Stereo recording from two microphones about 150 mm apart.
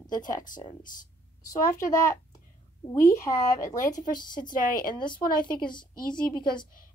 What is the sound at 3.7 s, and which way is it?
Speech, 55° left (ahead or behind).